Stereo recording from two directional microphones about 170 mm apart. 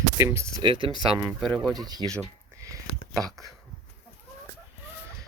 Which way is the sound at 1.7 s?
25° right (ahead or behind).